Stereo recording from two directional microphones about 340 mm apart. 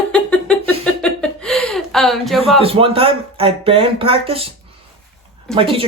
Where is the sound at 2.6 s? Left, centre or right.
Centre.